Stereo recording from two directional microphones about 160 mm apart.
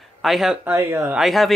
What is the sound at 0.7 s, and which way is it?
Speech, 15° right (ahead or behind).